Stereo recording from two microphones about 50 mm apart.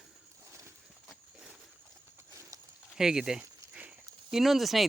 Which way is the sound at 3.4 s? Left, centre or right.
Right.